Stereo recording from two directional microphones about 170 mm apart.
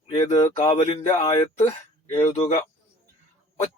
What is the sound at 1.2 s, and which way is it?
Speech, 20° left (ahead or behind).